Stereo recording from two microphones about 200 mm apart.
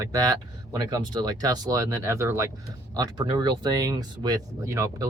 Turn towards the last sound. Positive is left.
turn(degrees=-15)  # may be behind; listen again after turning